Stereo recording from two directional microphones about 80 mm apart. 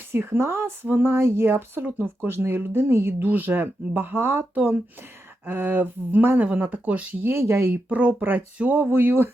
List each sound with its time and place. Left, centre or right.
0.1 s speech: right
7.3 s speech: right
7.9 s speech: centre